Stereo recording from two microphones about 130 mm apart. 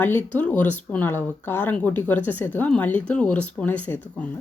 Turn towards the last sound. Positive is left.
turn(degrees=15)  # may be behind; listen again after turning